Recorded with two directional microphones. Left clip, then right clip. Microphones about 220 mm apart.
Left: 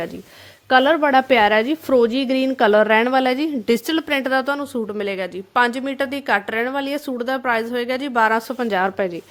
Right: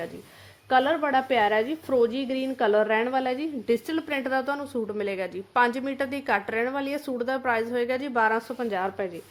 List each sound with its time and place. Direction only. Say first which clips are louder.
0.7 s a woman's voice: left 8 dB; 50° left (ahead or behind)